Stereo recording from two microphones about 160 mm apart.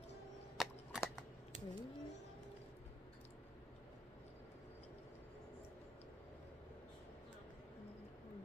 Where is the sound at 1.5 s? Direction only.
50° right (ahead or behind).